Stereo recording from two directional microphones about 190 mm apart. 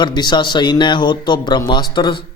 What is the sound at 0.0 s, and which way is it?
Speech, 25° left (ahead or behind).